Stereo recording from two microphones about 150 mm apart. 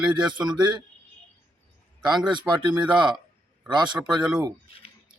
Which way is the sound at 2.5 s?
10° right (ahead or behind).